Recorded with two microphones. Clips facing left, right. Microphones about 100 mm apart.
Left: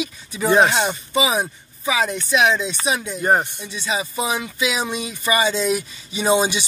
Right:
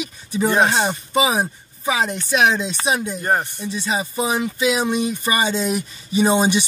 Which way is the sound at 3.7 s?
40° right (ahead or behind).